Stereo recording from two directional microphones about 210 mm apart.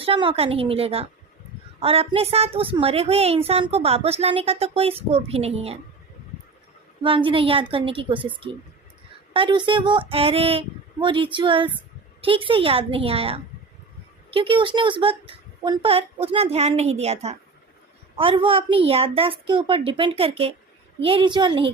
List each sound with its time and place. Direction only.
0.0 s a child's voice: 25° right (ahead or behind)
7.0 s a child's voice: 25° right (ahead or behind)